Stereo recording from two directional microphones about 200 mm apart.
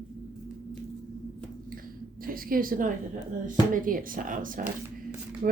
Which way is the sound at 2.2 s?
45° right (ahead or behind).